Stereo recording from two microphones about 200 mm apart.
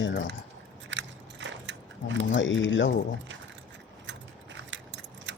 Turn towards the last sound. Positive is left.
turn(degrees=-65)  # may be behind; listen again after turning